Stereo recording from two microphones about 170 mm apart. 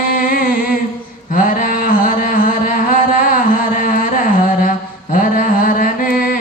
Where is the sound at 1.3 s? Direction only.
55° left (ahead or behind).